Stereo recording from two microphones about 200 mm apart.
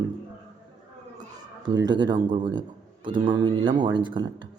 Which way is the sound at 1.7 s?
20° right (ahead or behind).